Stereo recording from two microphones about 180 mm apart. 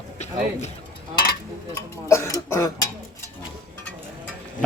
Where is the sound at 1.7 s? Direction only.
15° left (ahead or behind).